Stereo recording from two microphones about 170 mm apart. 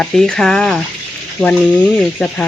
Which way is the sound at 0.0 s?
5° left (ahead or behind).